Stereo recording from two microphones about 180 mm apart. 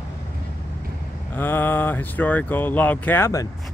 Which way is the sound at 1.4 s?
10° left (ahead or behind).